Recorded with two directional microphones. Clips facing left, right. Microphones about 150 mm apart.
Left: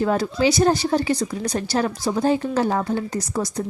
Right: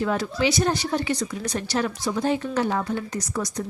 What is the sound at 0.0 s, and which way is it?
Speech, 35° left (ahead or behind).